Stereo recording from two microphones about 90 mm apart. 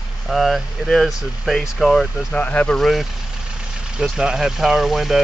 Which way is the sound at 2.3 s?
15° left (ahead or behind).